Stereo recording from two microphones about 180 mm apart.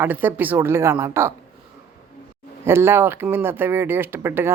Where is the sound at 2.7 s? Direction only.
15° right (ahead or behind).